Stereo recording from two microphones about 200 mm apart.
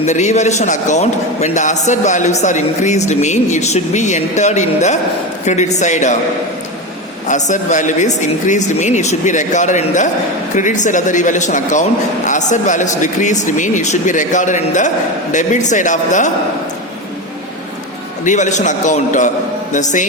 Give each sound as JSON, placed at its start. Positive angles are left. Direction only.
{"t": 0.0, "sound": "a man's voice", "side_deg": 35}
{"t": 7.3, "sound": "a man's voice", "side_deg": 35}
{"t": 18.3, "sound": "a man's voice", "side_deg": 35}